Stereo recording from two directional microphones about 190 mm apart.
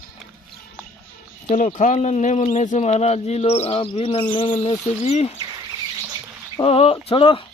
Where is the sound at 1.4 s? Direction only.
40° left (ahead or behind).